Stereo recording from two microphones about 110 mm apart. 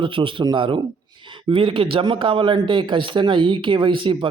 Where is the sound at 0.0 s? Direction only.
50° right (ahead or behind).